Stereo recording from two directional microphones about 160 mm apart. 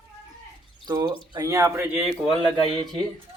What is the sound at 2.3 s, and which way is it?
Speech, 30° right (ahead or behind).